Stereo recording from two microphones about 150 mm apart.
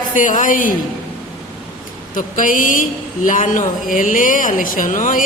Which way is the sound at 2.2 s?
60° left (ahead or behind).